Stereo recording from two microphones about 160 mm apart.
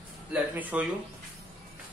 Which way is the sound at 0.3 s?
10° right (ahead or behind).